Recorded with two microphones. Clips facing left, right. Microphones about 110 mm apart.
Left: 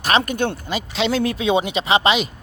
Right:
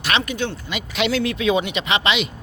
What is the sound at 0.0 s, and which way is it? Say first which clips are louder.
Speech: left 4 dB; 45° left (ahead or behind).